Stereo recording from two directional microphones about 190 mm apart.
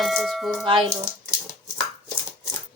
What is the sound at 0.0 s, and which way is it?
Speech, centre (ahead or behind).